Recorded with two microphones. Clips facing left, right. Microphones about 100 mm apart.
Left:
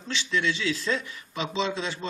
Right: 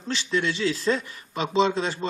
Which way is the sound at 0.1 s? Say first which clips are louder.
Right 2 dB; 40° right (ahead or behind).